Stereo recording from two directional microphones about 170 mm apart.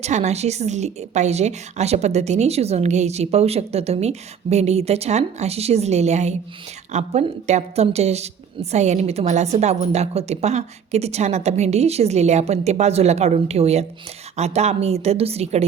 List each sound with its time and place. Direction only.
0.0 s a woman's voice: 40° right (ahead or behind)